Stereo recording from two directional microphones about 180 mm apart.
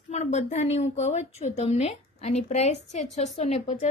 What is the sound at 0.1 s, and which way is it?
A woman's voice, 40° left (ahead or behind).